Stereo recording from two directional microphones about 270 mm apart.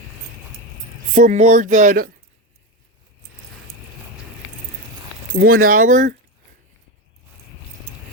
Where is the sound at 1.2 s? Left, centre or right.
Right.